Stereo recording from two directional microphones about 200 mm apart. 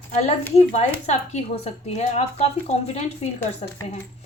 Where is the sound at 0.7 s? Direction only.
35° left (ahead or behind).